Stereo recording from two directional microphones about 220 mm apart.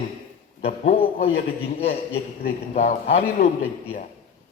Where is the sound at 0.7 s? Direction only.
30° left (ahead or behind).